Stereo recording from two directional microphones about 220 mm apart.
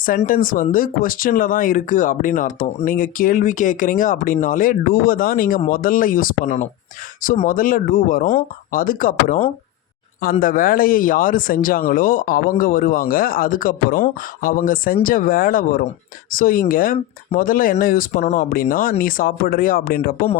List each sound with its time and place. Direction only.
0.0 s speech: 40° left (ahead or behind)
10.4 s speech: 40° left (ahead or behind)